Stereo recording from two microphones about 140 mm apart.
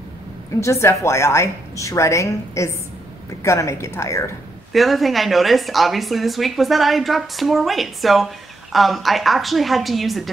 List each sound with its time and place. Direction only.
0.6 s a woman's voice: 20° left (ahead or behind)
4.7 s speech: centre (ahead or behind)